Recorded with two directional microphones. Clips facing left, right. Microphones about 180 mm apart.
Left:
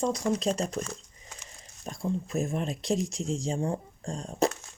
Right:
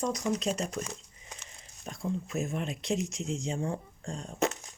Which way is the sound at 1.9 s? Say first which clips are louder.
Left 3 dB; 35° left (ahead or behind).